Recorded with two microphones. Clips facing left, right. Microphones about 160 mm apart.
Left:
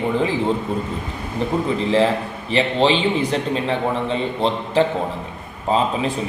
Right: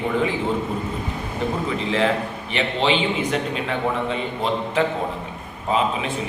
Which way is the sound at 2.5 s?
35° left (ahead or behind).